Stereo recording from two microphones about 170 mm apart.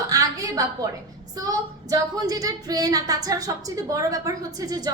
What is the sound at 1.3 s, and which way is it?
Child singing, 20° right (ahead or behind).